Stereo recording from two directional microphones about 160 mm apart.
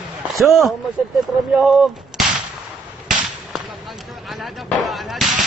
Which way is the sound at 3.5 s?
Centre (ahead or behind).